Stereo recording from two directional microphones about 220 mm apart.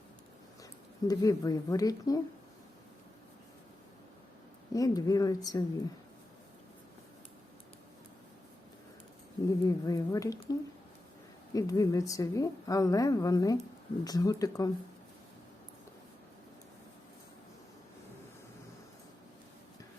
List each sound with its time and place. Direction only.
1.0 s a woman's voice: 15° left (ahead or behind)
4.7 s a woman's voice: 15° left (ahead or behind)
9.5 s a woman's voice: 15° left (ahead or behind)